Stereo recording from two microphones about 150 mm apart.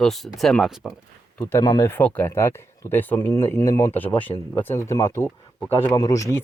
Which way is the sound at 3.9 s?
10° left (ahead or behind).